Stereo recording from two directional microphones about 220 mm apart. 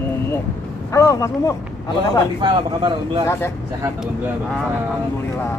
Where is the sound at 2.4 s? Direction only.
20° right (ahead or behind).